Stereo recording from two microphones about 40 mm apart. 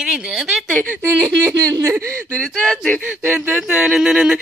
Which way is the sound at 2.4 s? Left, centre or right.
Centre.